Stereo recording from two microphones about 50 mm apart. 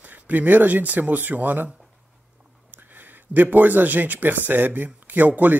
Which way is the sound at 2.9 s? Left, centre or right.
Right.